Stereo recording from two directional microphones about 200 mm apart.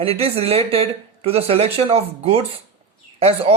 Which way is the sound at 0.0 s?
30° right (ahead or behind).